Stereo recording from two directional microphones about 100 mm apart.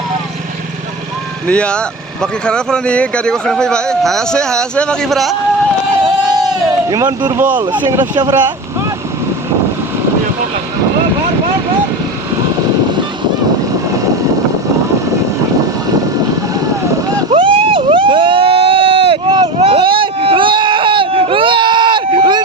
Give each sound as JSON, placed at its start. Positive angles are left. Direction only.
{"t": 1.5, "sound": "speech", "side_deg": 10}
{"t": 6.9, "sound": "speech", "side_deg": -45}
{"t": 7.3, "sound": "speech", "side_deg": -15}
{"t": 7.6, "sound": "speech", "side_deg": -50}
{"t": 17.3, "sound": "vehicle", "side_deg": -60}
{"t": 19.5, "sound": "vehicle", "side_deg": -90}
{"t": 19.8, "sound": "baby cry", "side_deg": -60}